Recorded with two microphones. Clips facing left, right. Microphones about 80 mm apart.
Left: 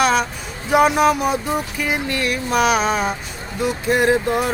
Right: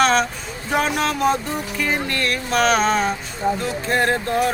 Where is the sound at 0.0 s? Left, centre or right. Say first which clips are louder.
Even; centre.